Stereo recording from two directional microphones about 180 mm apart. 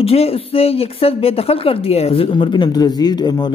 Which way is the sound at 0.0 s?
35° left (ahead or behind).